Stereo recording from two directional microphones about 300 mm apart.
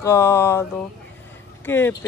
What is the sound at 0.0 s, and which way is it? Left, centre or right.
Speech, centre.